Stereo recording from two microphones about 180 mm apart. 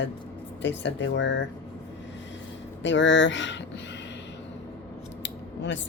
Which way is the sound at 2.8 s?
90° left.